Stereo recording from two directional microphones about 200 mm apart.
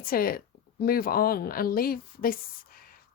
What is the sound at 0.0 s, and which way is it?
Speech, 45° left (ahead or behind).